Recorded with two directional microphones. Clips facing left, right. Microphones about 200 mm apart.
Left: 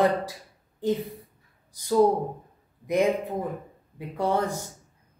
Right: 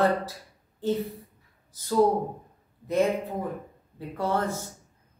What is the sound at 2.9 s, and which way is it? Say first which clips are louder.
Speech: left 1 dB; 15° left (ahead or behind).